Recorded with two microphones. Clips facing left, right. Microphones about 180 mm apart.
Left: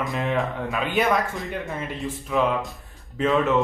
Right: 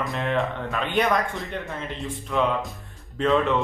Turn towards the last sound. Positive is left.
turn(degrees=5)  # may be behind; listen again after turning